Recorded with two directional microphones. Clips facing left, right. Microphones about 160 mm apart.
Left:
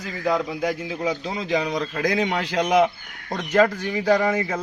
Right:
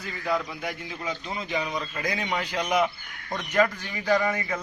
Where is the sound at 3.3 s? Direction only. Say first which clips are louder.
Left 5 dB; 40° left (ahead or behind).